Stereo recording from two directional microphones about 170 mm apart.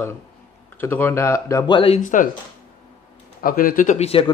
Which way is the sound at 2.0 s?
50° left (ahead or behind).